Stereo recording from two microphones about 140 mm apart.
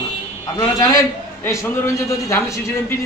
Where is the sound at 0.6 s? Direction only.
25° left (ahead or behind).